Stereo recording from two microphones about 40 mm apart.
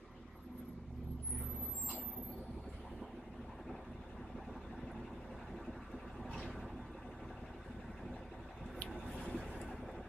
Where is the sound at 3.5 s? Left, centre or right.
Centre.